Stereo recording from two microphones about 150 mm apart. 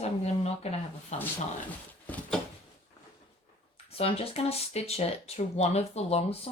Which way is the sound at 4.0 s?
40° left (ahead or behind).